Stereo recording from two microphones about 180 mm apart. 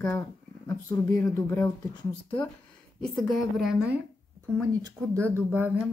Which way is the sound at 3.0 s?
Centre (ahead or behind).